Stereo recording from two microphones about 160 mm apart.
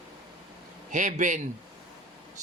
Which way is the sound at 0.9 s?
55° right (ahead or behind).